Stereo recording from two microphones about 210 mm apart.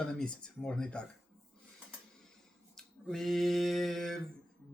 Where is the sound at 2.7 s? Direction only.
Centre (ahead or behind).